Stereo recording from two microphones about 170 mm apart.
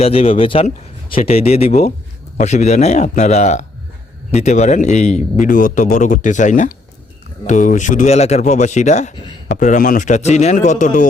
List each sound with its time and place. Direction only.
0.0 s a man's voice: 35° left (ahead or behind)